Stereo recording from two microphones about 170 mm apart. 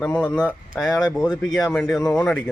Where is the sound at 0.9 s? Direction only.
25° left (ahead or behind).